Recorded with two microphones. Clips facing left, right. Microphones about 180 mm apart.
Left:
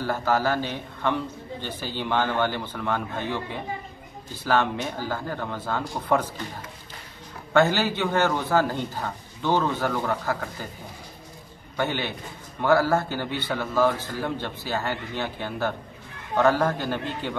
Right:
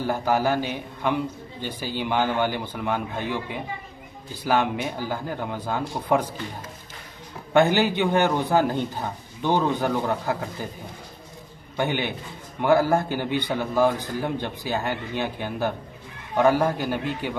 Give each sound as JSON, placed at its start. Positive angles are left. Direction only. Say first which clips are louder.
{"t": 0.0, "sound": "a man's voice", "louder": "right 1 dB", "side_deg": -15}
{"t": 7.5, "sound": "a man's voice", "louder": "right 2 dB", "side_deg": -15}
{"t": 11.7, "sound": "a man's voice", "louder": "right 2 dB", "side_deg": -15}